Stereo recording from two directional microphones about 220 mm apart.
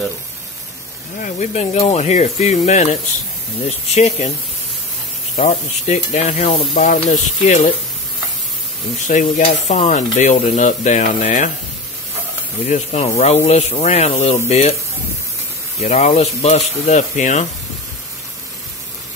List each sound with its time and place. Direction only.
1.2 s speech: 30° left (ahead or behind)
5.3 s speech: 30° left (ahead or behind)
9.0 s speech: 35° left (ahead or behind)
12.6 s speech: 30° left (ahead or behind)
15.8 s speech: 30° left (ahead or behind)